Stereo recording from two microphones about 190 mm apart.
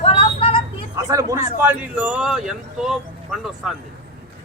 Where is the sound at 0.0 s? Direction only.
30° left (ahead or behind).